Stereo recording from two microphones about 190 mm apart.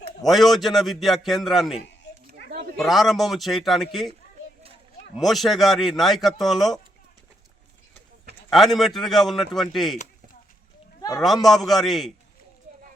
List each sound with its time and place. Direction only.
0.3 s a man's voice: centre (ahead or behind)
2.5 s a sound: 55° right (ahead or behind)
2.7 s a man's voice: centre (ahead or behind)
5.1 s a man's voice: centre (ahead or behind)
8.4 s a man's voice: centre (ahead or behind)
11.2 s a man's voice: centre (ahead or behind)